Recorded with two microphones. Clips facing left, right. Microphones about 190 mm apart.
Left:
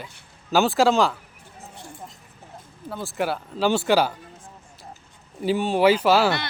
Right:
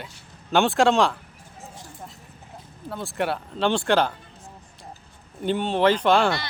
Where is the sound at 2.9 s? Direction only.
Centre (ahead or behind).